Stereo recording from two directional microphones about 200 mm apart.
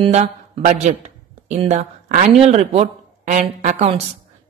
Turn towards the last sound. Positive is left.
turn(degrees=-35)  # may be behind; listen again after turning